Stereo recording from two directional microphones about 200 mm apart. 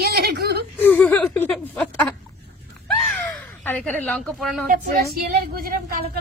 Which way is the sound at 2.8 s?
10° left (ahead or behind).